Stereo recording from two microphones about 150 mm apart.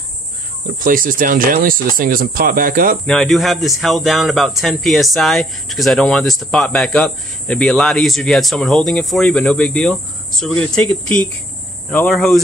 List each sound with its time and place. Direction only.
0.7 s speech: 65° right (ahead or behind)
3.1 s speech: centre (ahead or behind)
11.9 s speech: 5° left (ahead or behind)